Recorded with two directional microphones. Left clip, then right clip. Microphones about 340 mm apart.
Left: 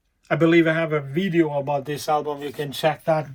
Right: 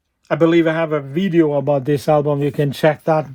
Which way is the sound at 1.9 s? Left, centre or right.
Right.